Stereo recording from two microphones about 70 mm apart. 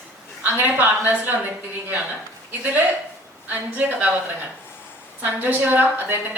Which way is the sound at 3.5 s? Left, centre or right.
Right.